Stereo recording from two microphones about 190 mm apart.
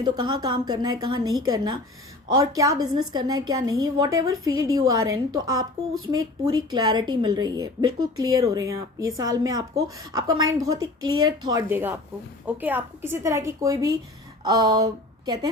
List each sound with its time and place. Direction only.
0.0 s a woman's voice: 25° right (ahead or behind)
11.7 s a woman's voice: 10° right (ahead or behind)